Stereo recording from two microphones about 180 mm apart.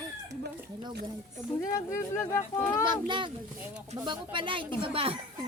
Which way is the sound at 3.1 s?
25° right (ahead or behind).